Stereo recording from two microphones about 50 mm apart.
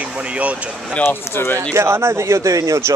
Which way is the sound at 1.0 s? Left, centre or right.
Left.